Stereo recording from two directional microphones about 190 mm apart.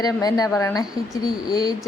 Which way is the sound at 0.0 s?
20° left (ahead or behind).